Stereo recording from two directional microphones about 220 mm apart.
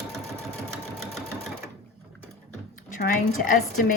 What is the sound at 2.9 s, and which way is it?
Speech, 35° left (ahead or behind).